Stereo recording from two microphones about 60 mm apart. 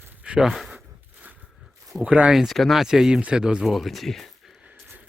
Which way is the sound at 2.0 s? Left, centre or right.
Centre.